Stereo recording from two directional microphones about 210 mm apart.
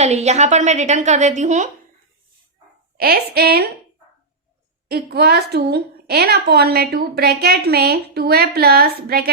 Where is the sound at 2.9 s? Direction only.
45° right (ahead or behind).